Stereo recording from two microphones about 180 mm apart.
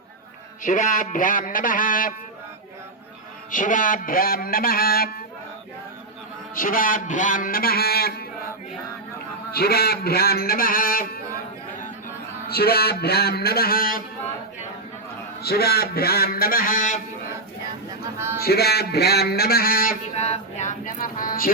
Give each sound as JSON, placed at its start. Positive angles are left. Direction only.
{"t": 0.6, "sound": "a man's voice", "side_deg": 45}
{"t": 3.5, "sound": "a man's voice", "side_deg": 45}
{"t": 6.6, "sound": "a man's voice", "side_deg": 50}
{"t": 9.5, "sound": "a man's voice", "side_deg": 60}
{"t": 12.5, "sound": "a man's voice", "side_deg": 60}
{"t": 15.4, "sound": "a man's voice", "side_deg": 60}
{"t": 18.3, "sound": "a man's voice", "side_deg": 60}
{"t": 20.1, "sound": "a man's voice", "side_deg": 35}